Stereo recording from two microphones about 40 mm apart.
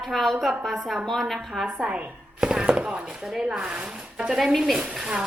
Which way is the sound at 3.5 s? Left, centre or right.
Right.